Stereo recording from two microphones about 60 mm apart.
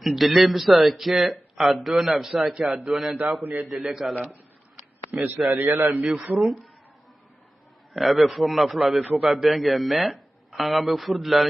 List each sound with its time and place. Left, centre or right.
0.0 s a man's voice: centre
5.1 s speech: centre
5.5 s a man's voice: right
5.9 s a man's voice: centre
7.9 s speech: centre